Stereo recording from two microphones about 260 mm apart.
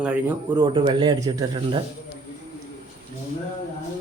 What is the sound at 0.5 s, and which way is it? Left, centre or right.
Speech, centre.